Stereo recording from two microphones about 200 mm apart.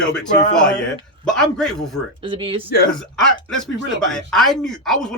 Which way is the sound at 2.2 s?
25° right (ahead or behind).